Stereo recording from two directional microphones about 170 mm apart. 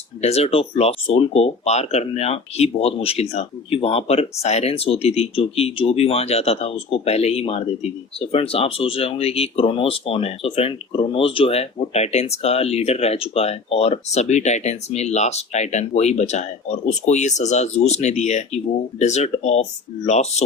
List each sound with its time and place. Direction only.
0.2 s speech: 40° left (ahead or behind)